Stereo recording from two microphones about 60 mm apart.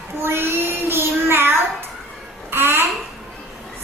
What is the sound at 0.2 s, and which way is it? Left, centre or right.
Child singing, right.